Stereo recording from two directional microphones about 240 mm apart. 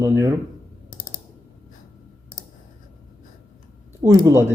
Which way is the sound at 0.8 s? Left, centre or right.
Left.